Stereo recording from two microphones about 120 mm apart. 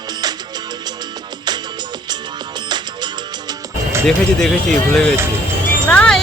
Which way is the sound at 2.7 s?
40° right (ahead or behind).